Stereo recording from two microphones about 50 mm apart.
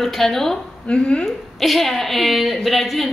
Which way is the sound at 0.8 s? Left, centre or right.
Centre.